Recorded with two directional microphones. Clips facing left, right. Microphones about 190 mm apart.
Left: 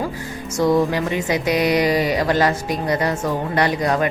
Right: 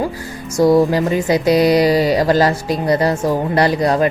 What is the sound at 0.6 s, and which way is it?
Speech, 35° right (ahead or behind).